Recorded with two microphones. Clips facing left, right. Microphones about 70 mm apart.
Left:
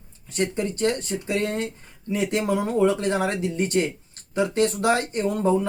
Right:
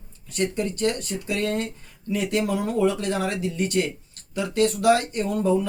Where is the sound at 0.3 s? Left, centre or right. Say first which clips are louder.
Even; left.